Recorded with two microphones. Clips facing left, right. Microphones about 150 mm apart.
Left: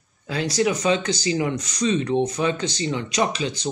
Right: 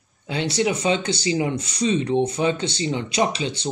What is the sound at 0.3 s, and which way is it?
Speech, 25° right (ahead or behind).